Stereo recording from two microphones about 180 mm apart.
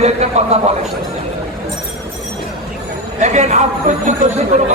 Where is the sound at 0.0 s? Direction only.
40° right (ahead or behind).